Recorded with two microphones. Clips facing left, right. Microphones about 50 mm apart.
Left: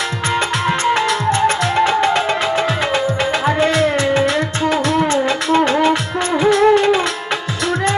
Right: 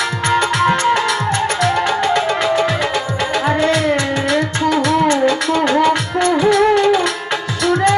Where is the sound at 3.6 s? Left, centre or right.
Left.